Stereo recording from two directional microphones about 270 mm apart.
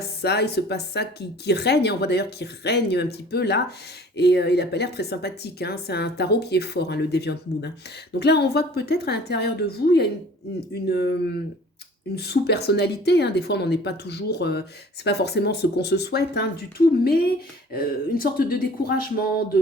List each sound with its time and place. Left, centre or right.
0.0 s a woman's voice: left
12.1 s a woman's voice: left